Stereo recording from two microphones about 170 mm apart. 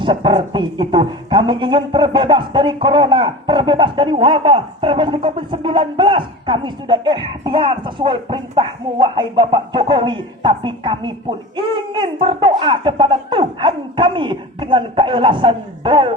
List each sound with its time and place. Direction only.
0.0 s speech: 30° right (ahead or behind)